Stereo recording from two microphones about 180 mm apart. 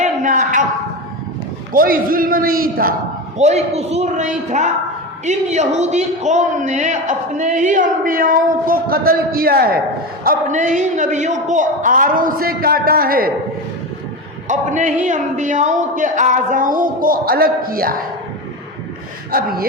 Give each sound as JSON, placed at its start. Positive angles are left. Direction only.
{"t": 0.0, "sound": "a sound", "side_deg": -45}
{"t": 1.7, "sound": "speech", "side_deg": -50}
{"t": 3.3, "sound": "a man's voice", "side_deg": -35}
{"t": 10.2, "sound": "speech", "side_deg": -45}
{"t": 14.4, "sound": "a man's voice", "side_deg": -45}
{"t": 19.3, "sound": "speech", "side_deg": -55}